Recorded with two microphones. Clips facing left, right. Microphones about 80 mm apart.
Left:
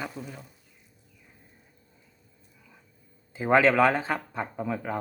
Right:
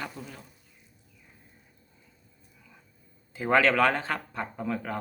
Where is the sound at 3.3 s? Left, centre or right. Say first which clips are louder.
Left 2 dB; centre.